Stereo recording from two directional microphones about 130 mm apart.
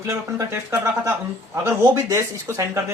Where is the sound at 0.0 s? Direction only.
25° right (ahead or behind).